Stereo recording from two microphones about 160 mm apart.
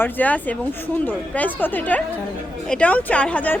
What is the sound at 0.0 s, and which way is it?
A woman's voice, 10° left (ahead or behind).